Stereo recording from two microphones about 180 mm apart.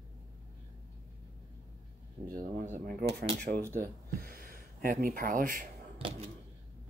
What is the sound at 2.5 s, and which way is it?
Speech, 45° right (ahead or behind).